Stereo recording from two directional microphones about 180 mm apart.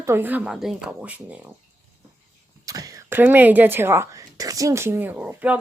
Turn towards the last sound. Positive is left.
turn(degrees=-5)  # may be behind; listen again after turning